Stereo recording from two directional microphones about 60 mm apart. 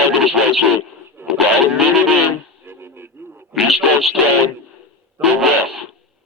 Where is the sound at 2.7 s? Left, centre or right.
Right.